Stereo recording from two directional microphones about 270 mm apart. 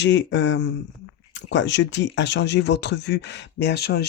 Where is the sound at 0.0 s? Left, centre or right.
Left.